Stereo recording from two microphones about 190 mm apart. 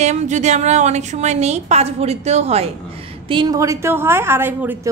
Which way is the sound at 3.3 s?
20° right (ahead or behind).